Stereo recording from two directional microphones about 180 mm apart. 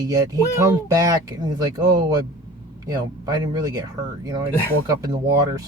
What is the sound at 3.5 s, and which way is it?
Speech, 20° right (ahead or behind).